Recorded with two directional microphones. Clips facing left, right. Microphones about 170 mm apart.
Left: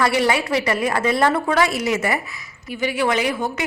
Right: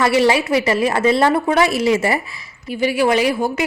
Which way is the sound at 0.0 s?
25° right (ahead or behind).